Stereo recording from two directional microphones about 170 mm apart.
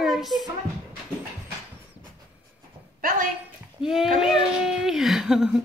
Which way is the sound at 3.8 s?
5° right (ahead or behind).